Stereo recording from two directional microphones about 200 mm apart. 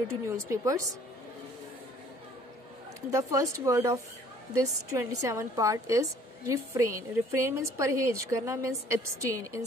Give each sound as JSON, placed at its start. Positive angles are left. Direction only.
{"t": 0.2, "sound": "a woman's voice", "side_deg": -15}
{"t": 3.1, "sound": "a woman's voice", "side_deg": -15}